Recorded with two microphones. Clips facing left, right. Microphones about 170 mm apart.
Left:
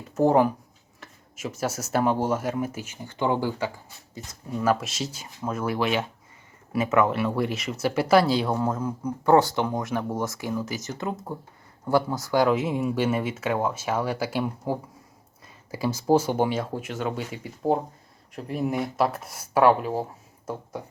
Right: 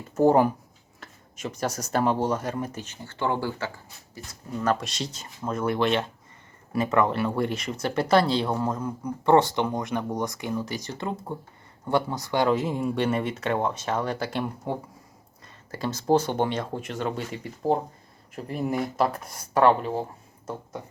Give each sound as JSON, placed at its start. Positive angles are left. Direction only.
{"t": 0.1, "sound": "speech", "side_deg": 0}
{"t": 4.6, "sound": "speech", "side_deg": 5}